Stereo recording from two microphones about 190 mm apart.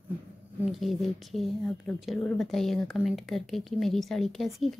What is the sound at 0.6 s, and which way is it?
A woman's voice, centre (ahead or behind).